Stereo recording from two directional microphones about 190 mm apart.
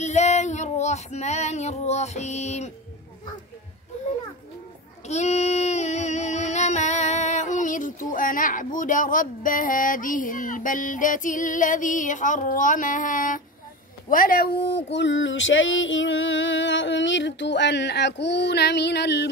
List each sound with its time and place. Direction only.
0.0 s female singing: 35° left (ahead or behind)
5.0 s child singing: 35° left (ahead or behind)
14.0 s speech: 45° left (ahead or behind)